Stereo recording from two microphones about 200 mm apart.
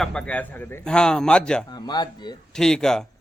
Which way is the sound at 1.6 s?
20° left (ahead or behind).